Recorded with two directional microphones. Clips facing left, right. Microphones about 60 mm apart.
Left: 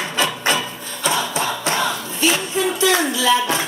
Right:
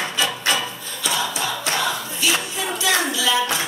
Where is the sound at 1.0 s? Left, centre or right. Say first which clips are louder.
Left 3 dB; left.